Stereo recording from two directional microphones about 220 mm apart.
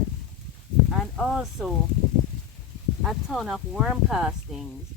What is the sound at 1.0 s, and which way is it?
Speech, centre (ahead or behind).